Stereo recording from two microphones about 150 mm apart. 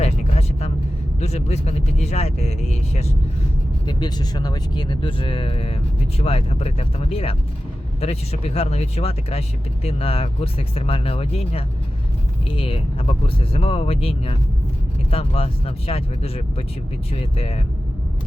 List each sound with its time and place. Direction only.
0.0 s vehicle: 45° left (ahead or behind)
1.2 s speech: 45° left (ahead or behind)
3.8 s speech: 30° left (ahead or behind)